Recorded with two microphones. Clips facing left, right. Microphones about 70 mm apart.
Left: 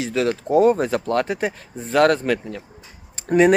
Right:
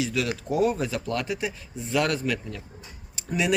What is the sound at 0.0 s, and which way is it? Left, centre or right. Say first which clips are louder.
Speech: left 6 dB; left.